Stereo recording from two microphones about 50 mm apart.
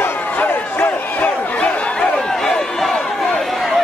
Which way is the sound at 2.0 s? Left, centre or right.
Centre.